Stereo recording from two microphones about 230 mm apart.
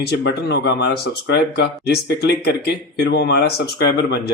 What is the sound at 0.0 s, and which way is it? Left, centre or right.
Speech, left.